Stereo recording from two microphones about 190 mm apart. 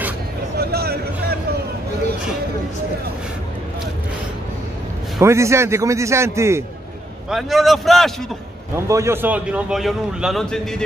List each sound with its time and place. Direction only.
0.6 s music: 55° right (ahead or behind)
5.2 s a man's voice: 15° right (ahead or behind)
7.2 s a man's voice: centre (ahead or behind)
8.7 s a man's voice: 15° right (ahead or behind); by 10.9 s 5° left (ahead or behind)